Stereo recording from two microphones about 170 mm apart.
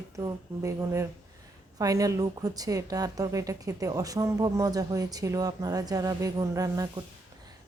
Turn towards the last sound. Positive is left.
turn(degrees=-20)  # may be behind; listen again after turning